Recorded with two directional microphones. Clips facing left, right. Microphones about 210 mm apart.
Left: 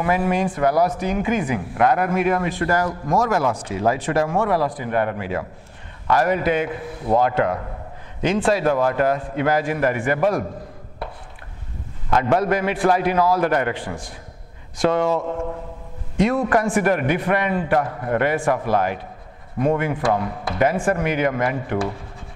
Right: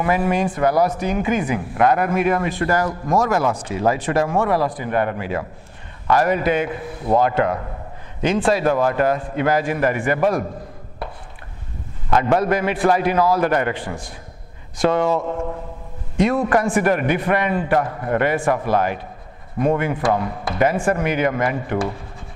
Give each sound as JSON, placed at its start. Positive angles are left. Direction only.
{"t": 0.0, "sound": "a man's voice", "side_deg": -15}
{"t": 12.1, "sound": "a man's voice", "side_deg": -15}
{"t": 15.1, "sound": "a man's voice", "side_deg": -25}
{"t": 16.2, "sound": "a man's voice", "side_deg": -15}